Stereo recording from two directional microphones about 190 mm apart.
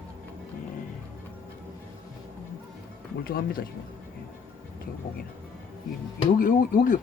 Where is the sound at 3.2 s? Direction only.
50° left (ahead or behind).